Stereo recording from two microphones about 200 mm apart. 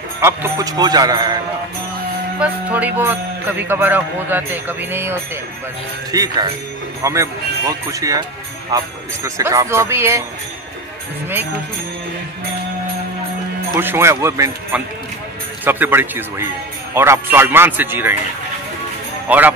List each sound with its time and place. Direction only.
0.2 s speech: 15° right (ahead or behind)
2.4 s speech: 10° right (ahead or behind)
13.7 s speech: 10° right (ahead or behind)
19.2 s speech: 10° right (ahead or behind)